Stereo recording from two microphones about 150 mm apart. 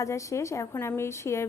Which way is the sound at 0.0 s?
20° left (ahead or behind).